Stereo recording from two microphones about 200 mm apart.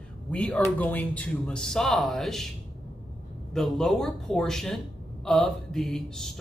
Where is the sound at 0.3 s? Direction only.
5° left (ahead or behind).